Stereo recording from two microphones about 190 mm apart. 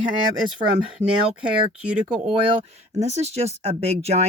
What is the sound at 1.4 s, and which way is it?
Speech, 5° right (ahead or behind).